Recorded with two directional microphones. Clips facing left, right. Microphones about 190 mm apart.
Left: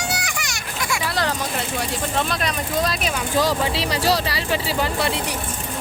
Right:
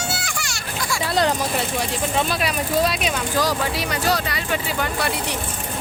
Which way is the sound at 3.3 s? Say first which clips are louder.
Left 4 dB; 25° left (ahead or behind).